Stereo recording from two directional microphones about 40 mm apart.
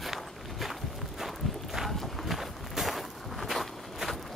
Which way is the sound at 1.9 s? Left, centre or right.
Centre.